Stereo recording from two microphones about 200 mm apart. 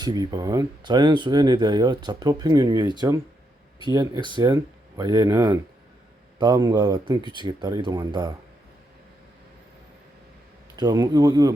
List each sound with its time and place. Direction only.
0.0 s speech: 20° right (ahead or behind)
10.8 s speech: 20° right (ahead or behind)